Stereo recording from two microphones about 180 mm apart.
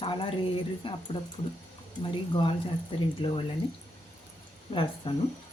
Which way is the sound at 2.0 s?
30° left (ahead or behind).